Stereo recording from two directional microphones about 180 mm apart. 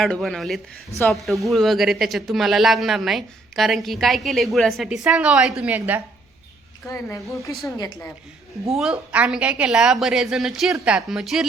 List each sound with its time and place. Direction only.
0.0 s a woman's voice: centre (ahead or behind)
6.8 s a woman's voice: 15° left (ahead or behind)
8.7 s speech: 5° right (ahead or behind)